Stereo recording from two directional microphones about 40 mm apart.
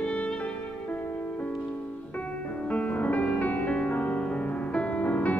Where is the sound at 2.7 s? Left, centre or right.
Left.